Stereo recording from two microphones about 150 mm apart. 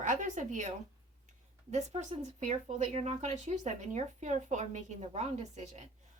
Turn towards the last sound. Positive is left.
turn(degrees=-50)  # may be behind; listen again after turning